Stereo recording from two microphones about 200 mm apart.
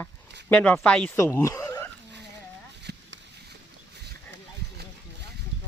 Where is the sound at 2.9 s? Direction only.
55° right (ahead or behind).